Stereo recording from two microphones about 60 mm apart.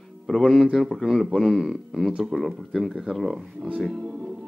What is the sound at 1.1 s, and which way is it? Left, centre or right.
Speech, centre.